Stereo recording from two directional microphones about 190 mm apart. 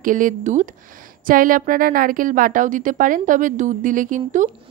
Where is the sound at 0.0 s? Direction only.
45° right (ahead or behind).